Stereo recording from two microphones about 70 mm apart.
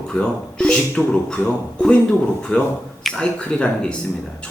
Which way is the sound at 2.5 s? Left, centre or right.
Centre.